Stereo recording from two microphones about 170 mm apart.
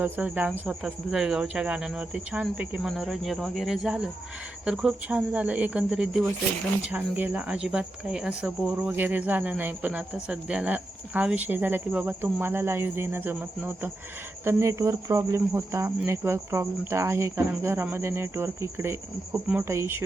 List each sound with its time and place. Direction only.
0.0 s speech: 10° right (ahead or behind)